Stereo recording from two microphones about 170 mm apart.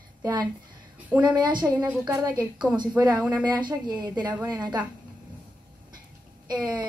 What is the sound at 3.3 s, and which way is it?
A woman's voice, 25° right (ahead or behind).